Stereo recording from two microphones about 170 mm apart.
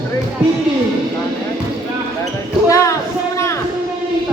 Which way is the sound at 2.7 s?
20° left (ahead or behind).